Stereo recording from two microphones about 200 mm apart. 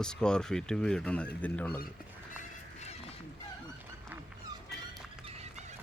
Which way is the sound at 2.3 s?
35° left (ahead or behind).